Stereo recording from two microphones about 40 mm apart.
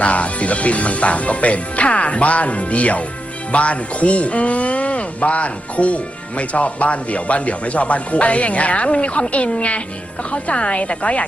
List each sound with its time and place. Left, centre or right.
0.0 s speech: left